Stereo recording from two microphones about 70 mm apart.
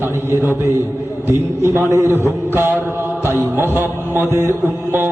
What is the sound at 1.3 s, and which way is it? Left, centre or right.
A man's voice, right.